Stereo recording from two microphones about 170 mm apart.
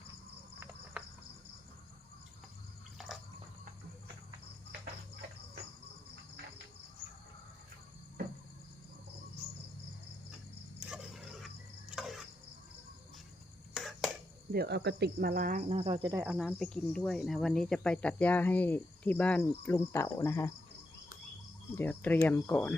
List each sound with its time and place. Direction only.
0.9 s cricket: 5° right (ahead or behind)
10.8 s a sound: centre (ahead or behind)
13.7 s finger snapping: centre (ahead or behind)
14.5 s cricket: 65° right (ahead or behind)
15.7 s cricket: 35° right (ahead or behind)
16.1 s cricket: 10° right (ahead or behind)
16.6 s speech: 5° left (ahead or behind)
21.8 s speech: 10° left (ahead or behind)